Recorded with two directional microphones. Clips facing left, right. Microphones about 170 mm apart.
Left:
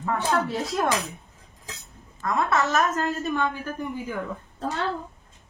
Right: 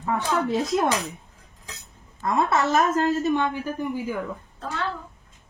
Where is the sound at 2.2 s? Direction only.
30° right (ahead or behind).